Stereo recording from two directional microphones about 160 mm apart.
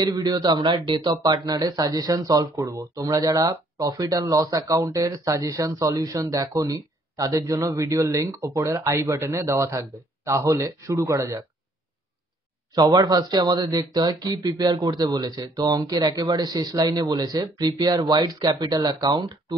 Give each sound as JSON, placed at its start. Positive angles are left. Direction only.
{"t": 0.0, "sound": "speech", "side_deg": -25}
{"t": 12.7, "sound": "speech", "side_deg": -25}